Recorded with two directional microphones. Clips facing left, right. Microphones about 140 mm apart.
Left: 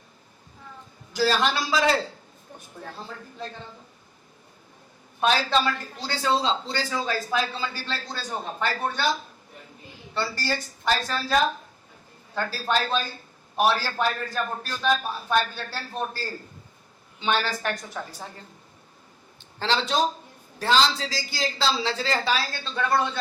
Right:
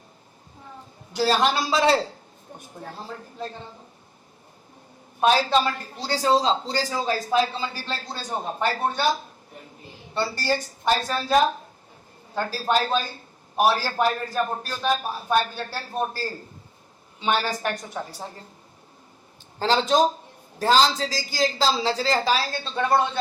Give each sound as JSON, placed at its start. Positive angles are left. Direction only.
{"t": 1.1, "sound": "a woman's voice", "side_deg": -30}
{"t": 5.2, "sound": "speech", "side_deg": -30}
{"t": 5.5, "sound": "a woman's voice", "side_deg": -15}
{"t": 5.7, "sound": "a woman's voice", "side_deg": -35}
{"t": 19.5, "sound": "speech", "side_deg": -40}